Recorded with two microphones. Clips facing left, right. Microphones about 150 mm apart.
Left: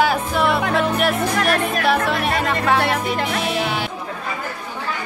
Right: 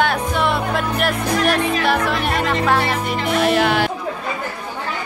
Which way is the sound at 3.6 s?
75° right (ahead or behind).